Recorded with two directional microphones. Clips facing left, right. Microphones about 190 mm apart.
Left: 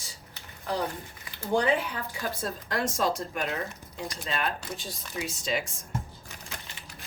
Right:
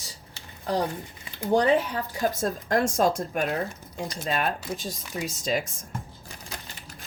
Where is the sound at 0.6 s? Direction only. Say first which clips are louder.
Right 4 dB; 30° right (ahead or behind); by 4.5 s 50° right (ahead or behind).